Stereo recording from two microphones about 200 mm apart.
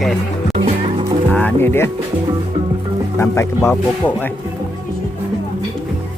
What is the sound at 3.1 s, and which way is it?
Speech, 15° left (ahead or behind).